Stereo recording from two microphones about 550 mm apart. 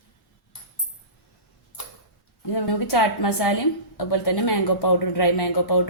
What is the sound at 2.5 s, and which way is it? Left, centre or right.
Speech, left.